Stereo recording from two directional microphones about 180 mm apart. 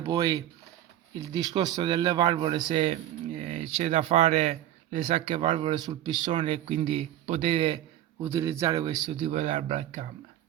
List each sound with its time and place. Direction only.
0.0 s a man's voice: 20° right (ahead or behind)
8.2 s speech: 15° right (ahead or behind); by 10.1 s 40° right (ahead or behind)